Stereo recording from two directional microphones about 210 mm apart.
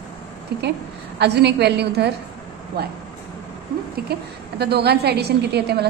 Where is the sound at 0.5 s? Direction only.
50° right (ahead or behind).